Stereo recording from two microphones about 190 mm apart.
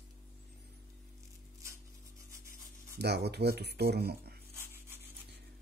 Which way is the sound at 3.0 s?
60° right (ahead or behind).